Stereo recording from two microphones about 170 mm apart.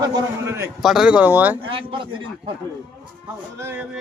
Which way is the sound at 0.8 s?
Centre (ahead or behind).